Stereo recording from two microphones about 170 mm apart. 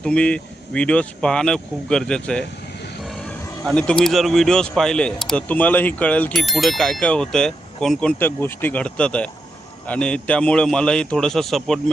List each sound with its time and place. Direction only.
0.0 s speech: 5° left (ahead or behind)